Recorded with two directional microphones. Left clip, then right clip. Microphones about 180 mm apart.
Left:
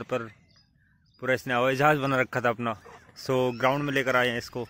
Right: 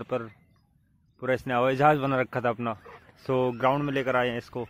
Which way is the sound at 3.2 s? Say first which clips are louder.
Even; centre (ahead or behind).